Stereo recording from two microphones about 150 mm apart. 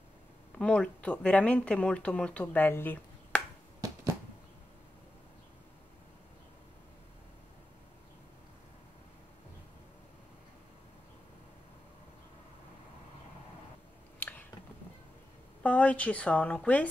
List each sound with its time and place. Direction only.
0.6 s speech: 5° left (ahead or behind)
3.8 s a sound: 20° right (ahead or behind)
15.6 s a woman's voice: 10° left (ahead or behind)